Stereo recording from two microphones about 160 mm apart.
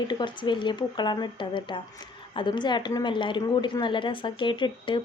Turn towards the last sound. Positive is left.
turn(degrees=30)  # may be behind; listen again after turning